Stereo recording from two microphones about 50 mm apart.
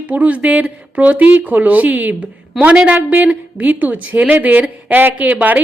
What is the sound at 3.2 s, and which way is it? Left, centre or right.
A woman's voice, right.